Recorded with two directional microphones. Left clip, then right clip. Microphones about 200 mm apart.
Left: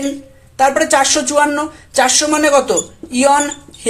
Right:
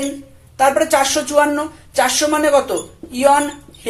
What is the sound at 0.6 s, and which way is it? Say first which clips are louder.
A woman's voice: left 2 dB; 35° left (ahead or behind).